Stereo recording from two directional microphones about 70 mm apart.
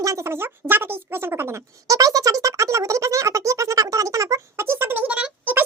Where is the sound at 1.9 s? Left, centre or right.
Right.